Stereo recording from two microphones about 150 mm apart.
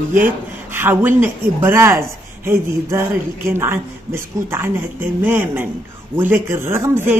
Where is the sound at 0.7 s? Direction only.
15° right (ahead or behind).